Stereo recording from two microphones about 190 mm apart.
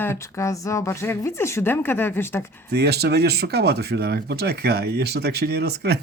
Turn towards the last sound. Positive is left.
turn(degrees=-60)  # may be behind; listen again after turning